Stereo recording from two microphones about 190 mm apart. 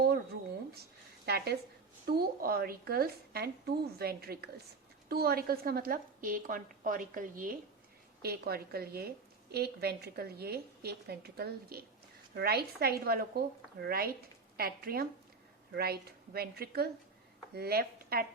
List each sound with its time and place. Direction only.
0.7 s a sound: 60° right (ahead or behind)
2.0 s a woman's voice: 50° right (ahead or behind)
8.2 s a woman's voice: 55° right (ahead or behind)